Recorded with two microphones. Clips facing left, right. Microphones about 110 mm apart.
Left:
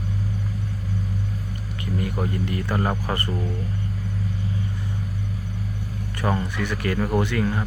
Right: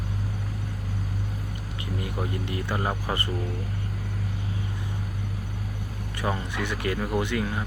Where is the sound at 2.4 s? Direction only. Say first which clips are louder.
Left 4 dB; 15° right (ahead or behind).